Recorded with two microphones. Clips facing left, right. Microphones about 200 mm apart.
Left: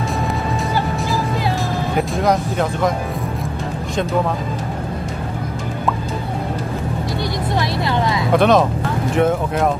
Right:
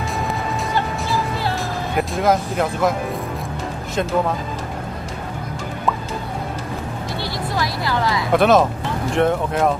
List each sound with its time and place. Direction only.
2.0 s speech: centre (ahead or behind)
7.5 s vehicle: 25° left (ahead or behind)
8.3 s speech: centre (ahead or behind)